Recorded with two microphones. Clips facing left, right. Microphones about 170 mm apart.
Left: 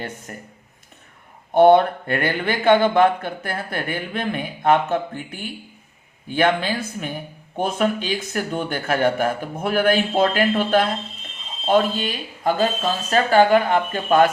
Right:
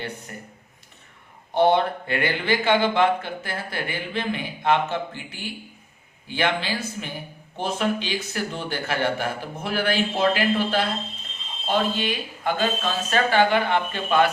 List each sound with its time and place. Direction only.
0.3 s speech: 45° left (ahead or behind)
1.5 s speech: 55° left (ahead or behind)